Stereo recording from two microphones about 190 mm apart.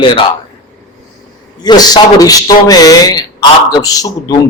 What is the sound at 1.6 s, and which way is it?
A man's voice, 20° left (ahead or behind).